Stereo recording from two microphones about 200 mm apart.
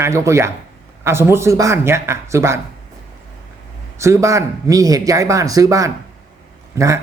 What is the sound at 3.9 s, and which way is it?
Speech, 15° right (ahead or behind).